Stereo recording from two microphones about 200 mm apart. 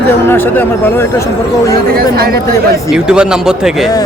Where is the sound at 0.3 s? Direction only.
10° left (ahead or behind).